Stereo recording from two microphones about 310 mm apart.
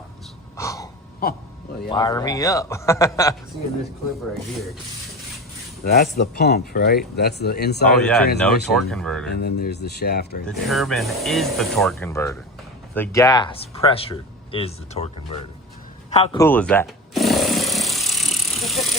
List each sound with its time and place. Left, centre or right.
0.5 s a sound: centre
1.9 s speech: centre
5.8 s speech: left
7.9 s speech: centre
9.4 s speech: left
10.4 s speech: centre
16.2 s tools: centre